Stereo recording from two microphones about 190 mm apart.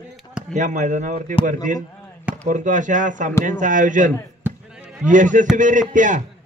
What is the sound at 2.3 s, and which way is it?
A man's voice, 40° right (ahead or behind).